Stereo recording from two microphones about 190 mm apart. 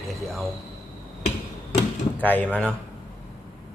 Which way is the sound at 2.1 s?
10° left (ahead or behind).